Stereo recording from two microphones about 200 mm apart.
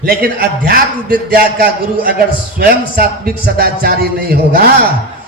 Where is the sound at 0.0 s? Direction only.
50° right (ahead or behind).